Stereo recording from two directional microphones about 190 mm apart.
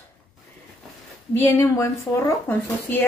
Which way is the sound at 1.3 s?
15° left (ahead or behind).